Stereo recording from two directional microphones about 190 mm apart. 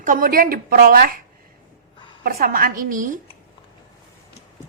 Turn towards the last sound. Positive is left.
turn(degrees=-45)  # may be behind; listen again after turning